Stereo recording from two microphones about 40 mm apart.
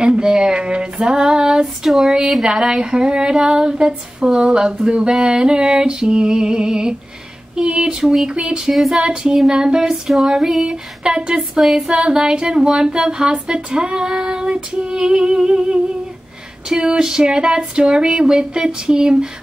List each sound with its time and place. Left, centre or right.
0.0 s female singing: right
1.9 s female singing: centre
2.4 s female singing: centre
8.7 s female singing: centre
9.0 s female singing: centre
9.5 s a sound: right
10.6 s female singing: right